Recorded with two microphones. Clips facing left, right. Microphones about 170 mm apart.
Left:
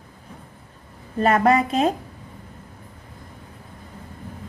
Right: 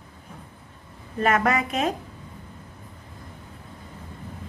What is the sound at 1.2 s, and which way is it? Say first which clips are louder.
Speech: left 5 dB; 30° left (ahead or behind).